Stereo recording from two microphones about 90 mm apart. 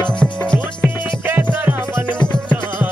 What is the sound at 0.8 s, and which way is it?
Music, 20° right (ahead or behind).